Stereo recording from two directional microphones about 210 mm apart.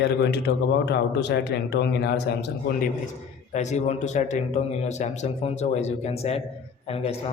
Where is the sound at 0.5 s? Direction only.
50° left (ahead or behind).